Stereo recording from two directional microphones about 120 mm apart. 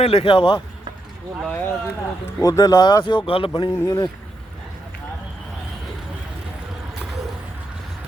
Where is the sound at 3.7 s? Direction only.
25° left (ahead or behind).